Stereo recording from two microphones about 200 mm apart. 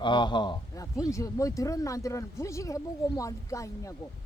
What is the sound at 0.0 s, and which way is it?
Speech, 20° left (ahead or behind).